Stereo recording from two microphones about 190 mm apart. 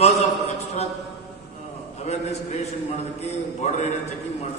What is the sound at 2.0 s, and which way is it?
A man's voice, 35° left (ahead or behind).